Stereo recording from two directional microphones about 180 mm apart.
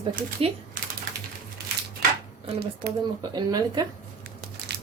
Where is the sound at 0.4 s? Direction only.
35° right (ahead or behind).